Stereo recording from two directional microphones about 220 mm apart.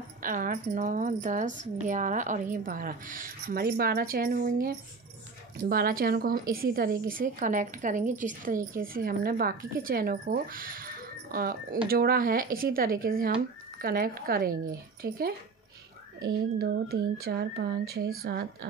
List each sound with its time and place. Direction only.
0.2 s a woman's voice: 40° right (ahead or behind)